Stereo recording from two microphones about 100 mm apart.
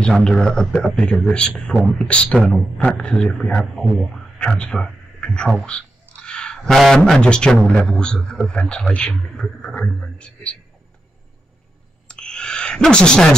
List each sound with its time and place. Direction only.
0.0 s speech: 5° left (ahead or behind)
12.1 s speech: 10° left (ahead or behind)